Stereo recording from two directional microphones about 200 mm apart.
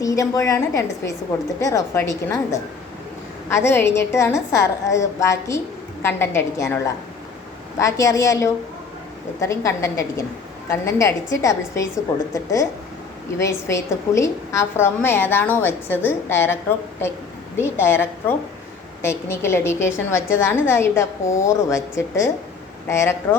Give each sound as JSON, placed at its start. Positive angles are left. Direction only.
{"t": 0.0, "sound": "a woman's voice", "side_deg": 15}